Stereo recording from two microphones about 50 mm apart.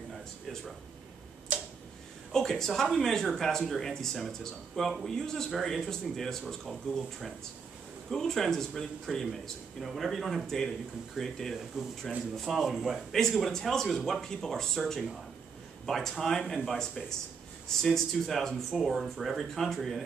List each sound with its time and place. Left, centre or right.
1.5 s tick-tock: right
2.3 s speech: centre
11.7 s speech: centre
13.4 s speech: centre